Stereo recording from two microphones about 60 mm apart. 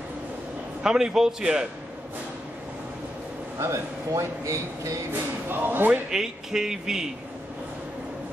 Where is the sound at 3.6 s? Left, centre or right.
Right.